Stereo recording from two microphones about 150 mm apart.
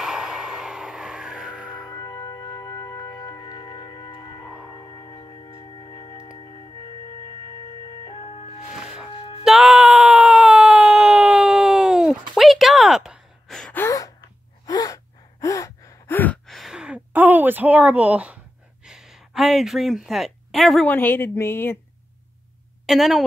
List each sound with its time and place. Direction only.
0.0 s a sound: 5° right (ahead or behind)
1.9 s music: 30° left (ahead or behind)
4.8 s singing bowl: 25° left (ahead or behind)
8.8 s music: 5° right (ahead or behind)
9.4 s a sound: 5° right (ahead or behind)
13.8 s gasp: 25° left (ahead or behind)
16.4 s a sound: centre (ahead or behind)
20.9 s speech: 15° left (ahead or behind)
22.8 s a woman's voice: centre (ahead or behind)